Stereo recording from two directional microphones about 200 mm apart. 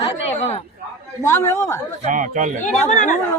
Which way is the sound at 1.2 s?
15° left (ahead or behind).